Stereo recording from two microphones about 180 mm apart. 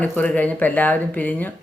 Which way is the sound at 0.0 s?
10° left (ahead or behind).